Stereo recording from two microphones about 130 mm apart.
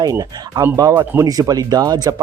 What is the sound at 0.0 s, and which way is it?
A man's voice, 25° right (ahead or behind).